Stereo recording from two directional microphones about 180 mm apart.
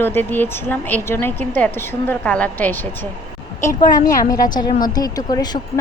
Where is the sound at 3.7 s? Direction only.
20° left (ahead or behind).